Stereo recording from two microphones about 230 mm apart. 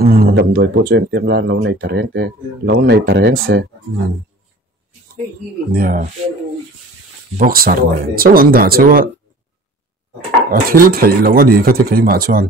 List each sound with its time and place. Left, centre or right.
0.0 s speech: right
5.7 s speech: right
7.3 s speech: right
10.5 s speech: right